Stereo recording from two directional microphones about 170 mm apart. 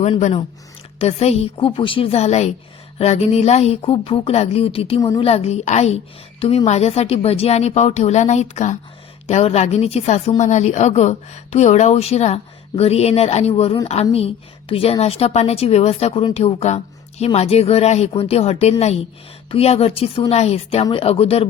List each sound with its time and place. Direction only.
0.0 s a woman's voice: 40° left (ahead or behind)
4.9 s a woman's voice: 20° left (ahead or behind)
5.2 s a woman's voice: 35° left (ahead or behind)